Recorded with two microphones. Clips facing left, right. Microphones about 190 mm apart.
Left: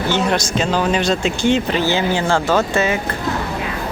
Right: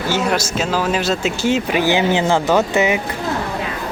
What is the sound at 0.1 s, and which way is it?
Speech, 5° right (ahead or behind).